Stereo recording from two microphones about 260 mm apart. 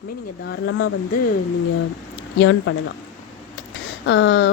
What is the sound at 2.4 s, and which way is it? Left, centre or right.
Speech, left.